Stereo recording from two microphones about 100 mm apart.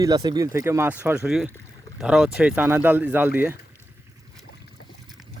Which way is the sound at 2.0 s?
5° right (ahead or behind).